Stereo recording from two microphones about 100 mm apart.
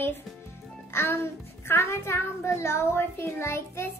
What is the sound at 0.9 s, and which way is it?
A child's voice, 25° left (ahead or behind).